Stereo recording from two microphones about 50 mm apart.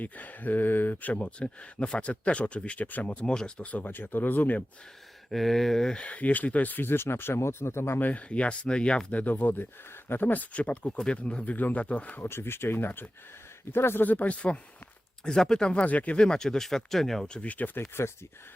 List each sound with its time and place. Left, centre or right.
0.0 s speech: left
1.1 s speech: left
5.3 s speech: centre
6.0 s speech: left
6.9 s speech: left
7.9 s speech: left
8.2 s speech: left
12.1 s speech: left
14.0 s speech: left
15.2 s speech: centre
16.2 s speech: centre
17.2 s speech: left
17.7 s speech: left